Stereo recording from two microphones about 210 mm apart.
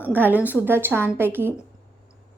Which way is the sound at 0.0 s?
10° right (ahead or behind).